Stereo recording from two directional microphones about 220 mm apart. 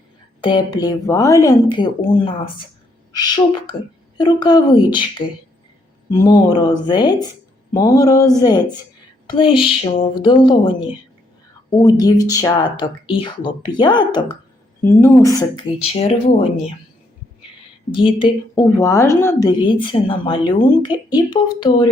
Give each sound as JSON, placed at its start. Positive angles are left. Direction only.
{"t": 0.4, "sound": "a woman's voice", "side_deg": 20}
{"t": 15.9, "sound": "a woman's voice", "side_deg": 25}
{"t": 17.9, "sound": "a woman's voice", "side_deg": 25}